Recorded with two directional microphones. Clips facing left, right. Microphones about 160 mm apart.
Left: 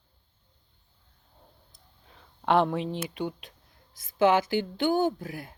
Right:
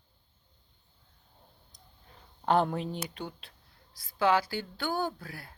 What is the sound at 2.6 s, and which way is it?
Speech, centre (ahead or behind).